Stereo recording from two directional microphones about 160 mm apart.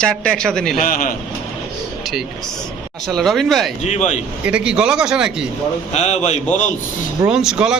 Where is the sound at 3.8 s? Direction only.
45° left (ahead or behind).